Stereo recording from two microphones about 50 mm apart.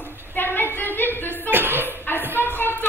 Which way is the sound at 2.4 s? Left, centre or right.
Left.